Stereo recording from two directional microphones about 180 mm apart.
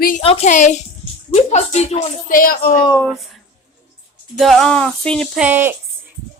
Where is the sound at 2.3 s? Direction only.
55° left (ahead or behind).